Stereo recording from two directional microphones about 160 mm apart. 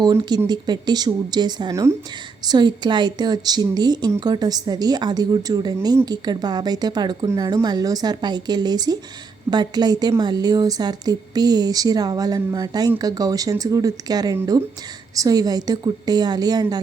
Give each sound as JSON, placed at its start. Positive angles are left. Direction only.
{"t": 0.0, "sound": "a woman's voice", "side_deg": -25}